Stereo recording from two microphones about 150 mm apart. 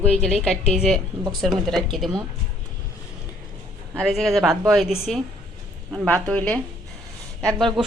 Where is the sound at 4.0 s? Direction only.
Centre (ahead or behind).